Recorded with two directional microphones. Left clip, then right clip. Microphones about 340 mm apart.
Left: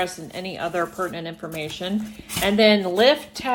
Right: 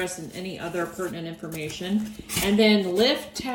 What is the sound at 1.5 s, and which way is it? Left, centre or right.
Speech, centre.